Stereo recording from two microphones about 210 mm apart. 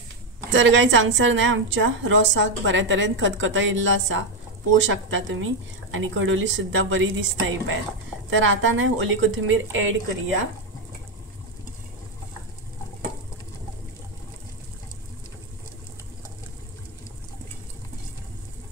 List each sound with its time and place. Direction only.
0.5 s a woman's voice: 65° right (ahead or behind)